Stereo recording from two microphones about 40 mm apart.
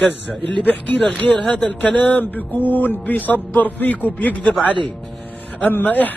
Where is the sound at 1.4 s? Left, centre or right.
Left.